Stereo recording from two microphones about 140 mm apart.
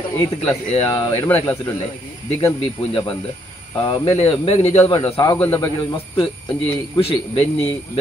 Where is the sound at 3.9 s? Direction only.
40° left (ahead or behind).